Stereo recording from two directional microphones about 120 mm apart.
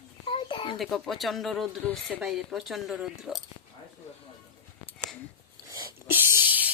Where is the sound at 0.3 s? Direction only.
45° left (ahead or behind).